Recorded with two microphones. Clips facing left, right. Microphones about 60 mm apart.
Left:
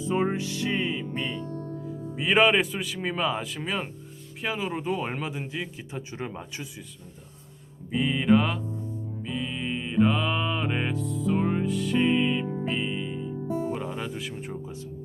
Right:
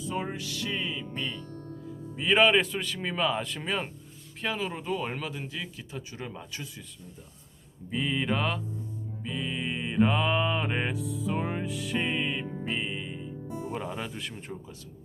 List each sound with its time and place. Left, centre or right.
0.0 s music: left
2.1 s a man's voice: centre
7.9 s music: centre
13.5 s music: left
13.7 s speech: centre